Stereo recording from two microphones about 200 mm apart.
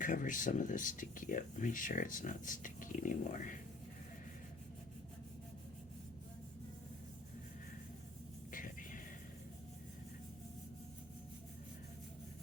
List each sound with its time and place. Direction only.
0.0 s speech: 40° left (ahead or behind)
8.5 s music: 40° left (ahead or behind)